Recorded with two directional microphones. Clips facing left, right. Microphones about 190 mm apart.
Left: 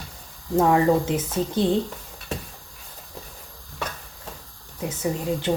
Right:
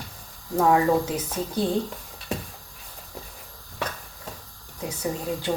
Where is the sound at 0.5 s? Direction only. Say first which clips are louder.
Left 2 dB; 25° left (ahead or behind).